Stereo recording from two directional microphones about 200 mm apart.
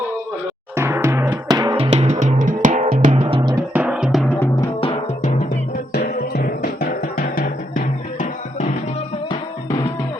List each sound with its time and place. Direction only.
0.8 s music: 10° right (ahead or behind); by 2.8 s 40° right (ahead or behind)
2.9 s drum: 45° right (ahead or behind)
3.2 s music: 30° right (ahead or behind)
3.5 s music: 10° right (ahead or behind)
4.8 s music: 30° left (ahead or behind)
5.9 s music: 55° left (ahead or behind)